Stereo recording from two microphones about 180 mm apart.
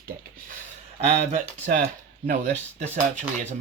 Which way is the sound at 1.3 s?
45° right (ahead or behind).